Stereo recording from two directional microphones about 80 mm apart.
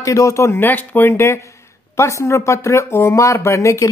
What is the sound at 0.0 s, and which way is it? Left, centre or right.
Speech, left.